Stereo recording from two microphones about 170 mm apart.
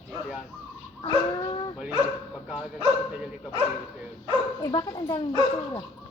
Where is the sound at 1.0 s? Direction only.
30° left (ahead or behind).